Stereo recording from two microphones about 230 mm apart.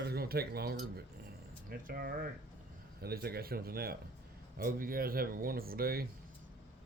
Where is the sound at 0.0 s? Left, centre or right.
Right.